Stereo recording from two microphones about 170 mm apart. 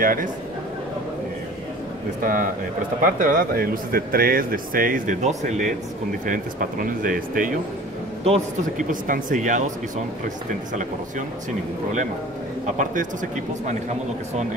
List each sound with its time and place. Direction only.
0.0 s speech: 55° right (ahead or behind)
2.2 s speech: 55° right (ahead or behind)
10.7 s speech: 50° right (ahead or behind)
12.6 s speech: 50° right (ahead or behind)